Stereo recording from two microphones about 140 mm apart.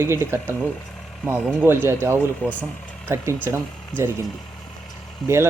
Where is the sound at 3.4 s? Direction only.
15° right (ahead or behind).